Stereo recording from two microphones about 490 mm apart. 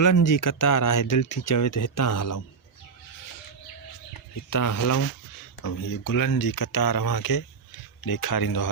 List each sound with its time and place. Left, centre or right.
0.0 s speech: left
4.1 s speech: left